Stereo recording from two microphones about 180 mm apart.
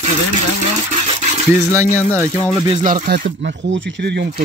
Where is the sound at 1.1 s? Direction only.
35° right (ahead or behind).